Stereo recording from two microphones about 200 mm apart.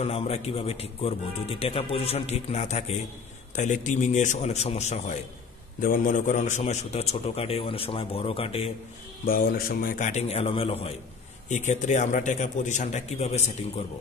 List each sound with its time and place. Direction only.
0.0 s a man's voice: 30° left (ahead or behind)
9.2 s a man's voice: 45° left (ahead or behind)